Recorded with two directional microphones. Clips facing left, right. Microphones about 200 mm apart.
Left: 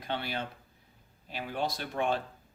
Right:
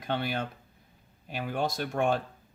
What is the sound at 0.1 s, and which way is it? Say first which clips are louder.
Speech: right 4 dB; 50° right (ahead or behind).